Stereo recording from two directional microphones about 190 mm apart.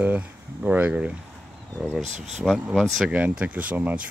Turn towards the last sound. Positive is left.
turn(degrees=-10)  # may be behind; listen again after turning